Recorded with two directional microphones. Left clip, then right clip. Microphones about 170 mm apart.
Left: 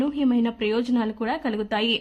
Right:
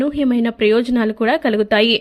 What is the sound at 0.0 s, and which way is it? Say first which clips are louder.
A woman's voice: right 6 dB; 25° right (ahead or behind).